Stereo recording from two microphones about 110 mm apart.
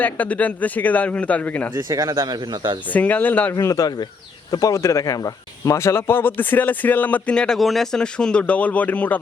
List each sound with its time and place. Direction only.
0.0 s speech: 15° left (ahead or behind)
1.7 s speech: 30° right (ahead or behind)
2.8 s speech: 15° left (ahead or behind)
3.5 s speech: 30° left (ahead or behind); by 9.1 s 15° left (ahead or behind)